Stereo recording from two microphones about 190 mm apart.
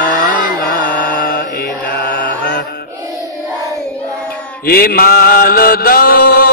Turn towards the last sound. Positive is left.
turn(degrees=50)  # may be behind; listen again after turning